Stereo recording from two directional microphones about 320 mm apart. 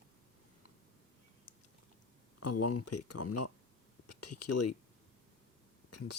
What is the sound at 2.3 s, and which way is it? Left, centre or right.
Speech, left.